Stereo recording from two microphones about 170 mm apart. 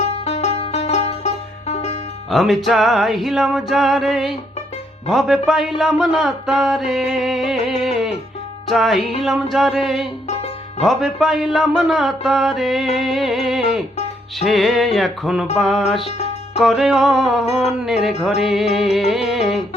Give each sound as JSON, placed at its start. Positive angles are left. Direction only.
{"t": 0.3, "sound": "music", "side_deg": 40}
{"t": 2.3, "sound": "music", "side_deg": 0}
{"t": 10.2, "sound": "music", "side_deg": 40}
{"t": 10.8, "sound": "music", "side_deg": 0}
{"t": 16.0, "sound": "music", "side_deg": 35}
{"t": 16.6, "sound": "music", "side_deg": 0}